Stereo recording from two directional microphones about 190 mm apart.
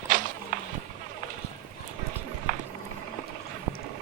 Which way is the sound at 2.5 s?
40° right (ahead or behind).